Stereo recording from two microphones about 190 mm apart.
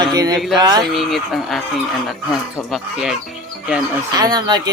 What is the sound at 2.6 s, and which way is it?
Speech, centre (ahead or behind).